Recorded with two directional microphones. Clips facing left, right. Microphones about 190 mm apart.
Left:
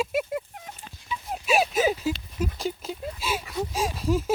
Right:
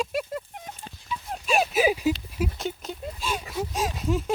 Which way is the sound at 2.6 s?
Centre (ahead or behind).